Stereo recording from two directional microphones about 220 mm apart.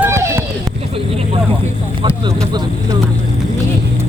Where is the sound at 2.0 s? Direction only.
25° right (ahead or behind).